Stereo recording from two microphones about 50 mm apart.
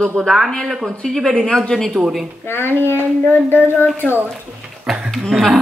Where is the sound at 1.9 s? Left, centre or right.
Centre.